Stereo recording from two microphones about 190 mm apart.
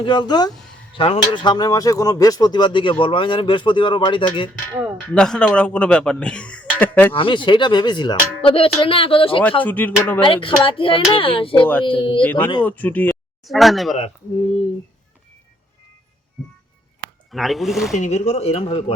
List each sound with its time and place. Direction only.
0.0 s speech: 25° left (ahead or behind)
5.1 s speech: 5° left (ahead or behind)
7.1 s speech: 25° left (ahead or behind)
9.4 s speech: 10° left (ahead or behind)
10.2 s speech: 25° left (ahead or behind)
12.2 s speech: 10° left (ahead or behind)
17.3 s speech: centre (ahead or behind)
17.9 s speech: 35° left (ahead or behind)